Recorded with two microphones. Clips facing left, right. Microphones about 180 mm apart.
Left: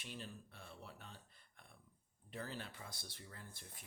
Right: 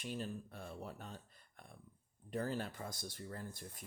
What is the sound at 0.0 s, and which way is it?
Speech, 45° right (ahead or behind).